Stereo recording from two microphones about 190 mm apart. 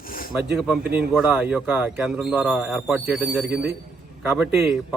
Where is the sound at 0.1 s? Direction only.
50° left (ahead or behind).